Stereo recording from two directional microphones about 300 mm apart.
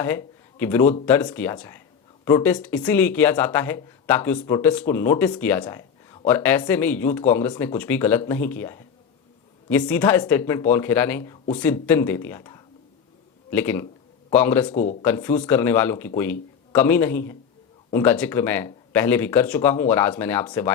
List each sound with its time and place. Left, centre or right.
0.0 s speech: centre
14.7 s speech: left
15.0 s speech: centre